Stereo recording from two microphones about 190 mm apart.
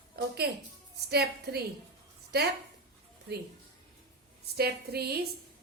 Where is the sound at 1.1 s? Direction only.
55° right (ahead or behind).